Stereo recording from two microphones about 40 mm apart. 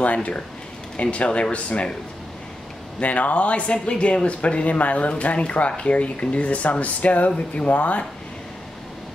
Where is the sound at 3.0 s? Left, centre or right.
Left.